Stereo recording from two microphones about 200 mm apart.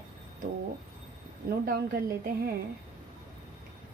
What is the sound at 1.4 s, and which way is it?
Speech, 45° right (ahead or behind).